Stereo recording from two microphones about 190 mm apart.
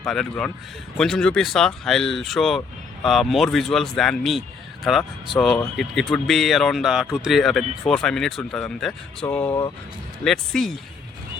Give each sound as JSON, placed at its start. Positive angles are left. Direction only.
{"t": 0.0, "sound": "speech", "side_deg": 0}
{"t": 9.5, "sound": "speech", "side_deg": 20}
{"t": 10.2, "sound": "speech", "side_deg": 0}